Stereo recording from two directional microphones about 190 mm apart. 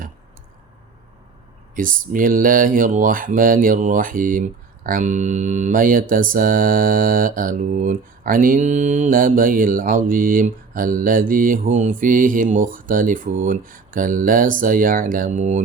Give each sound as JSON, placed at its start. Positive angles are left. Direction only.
{"t": 1.7, "sound": "speech", "side_deg": -45}